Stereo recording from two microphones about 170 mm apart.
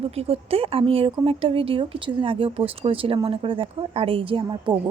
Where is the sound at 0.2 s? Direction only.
35° right (ahead or behind).